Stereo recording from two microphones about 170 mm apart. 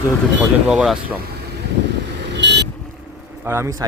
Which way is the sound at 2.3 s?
90° right.